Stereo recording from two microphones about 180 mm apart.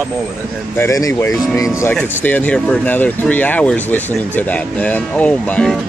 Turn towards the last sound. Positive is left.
turn(degrees=5)  # may be behind; listen again after turning